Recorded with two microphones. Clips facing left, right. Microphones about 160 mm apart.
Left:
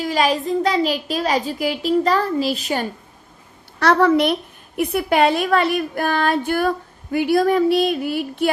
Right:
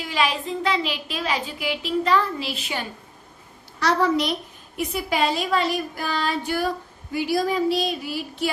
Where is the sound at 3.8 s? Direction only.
60° left (ahead or behind).